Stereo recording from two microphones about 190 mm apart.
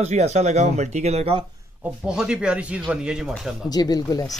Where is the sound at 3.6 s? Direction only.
20° left (ahead or behind).